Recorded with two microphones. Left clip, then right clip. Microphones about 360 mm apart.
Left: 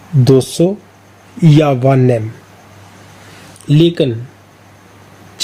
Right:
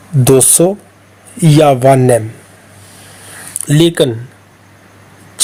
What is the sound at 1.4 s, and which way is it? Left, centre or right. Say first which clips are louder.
Speech: right 4 dB; centre.